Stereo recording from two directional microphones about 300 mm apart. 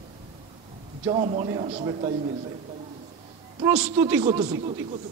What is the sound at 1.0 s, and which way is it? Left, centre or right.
A man's voice, centre.